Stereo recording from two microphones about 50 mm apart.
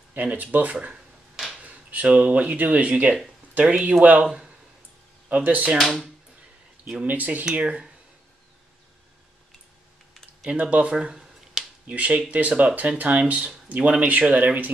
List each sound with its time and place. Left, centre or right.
0.1 s speech: right
4.3 s a sound: centre
5.3 s speech: right
7.1 s speech: right
10.4 s speech: right
11.8 s speech: right